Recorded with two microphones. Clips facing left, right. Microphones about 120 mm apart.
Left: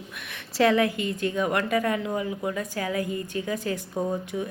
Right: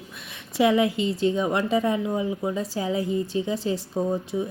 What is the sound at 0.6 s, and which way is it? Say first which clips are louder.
A woman's voice: right 1 dB; 20° right (ahead or behind).